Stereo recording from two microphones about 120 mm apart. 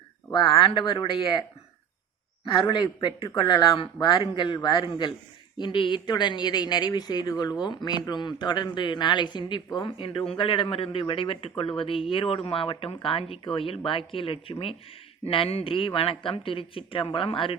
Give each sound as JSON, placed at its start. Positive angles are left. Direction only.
{"t": 0.3, "sound": "speech", "side_deg": 40}